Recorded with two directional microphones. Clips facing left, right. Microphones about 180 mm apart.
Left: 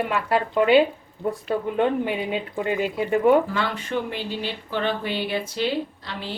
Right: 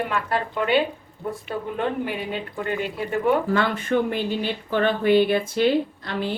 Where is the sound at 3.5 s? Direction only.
50° right (ahead or behind).